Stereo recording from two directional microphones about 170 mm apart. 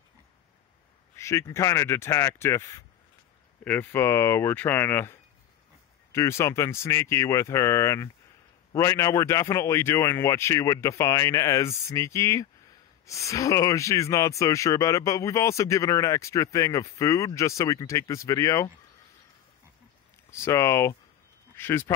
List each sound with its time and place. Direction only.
1.1 s speech: 15° left (ahead or behind)
20.2 s speech: 15° left (ahead or behind)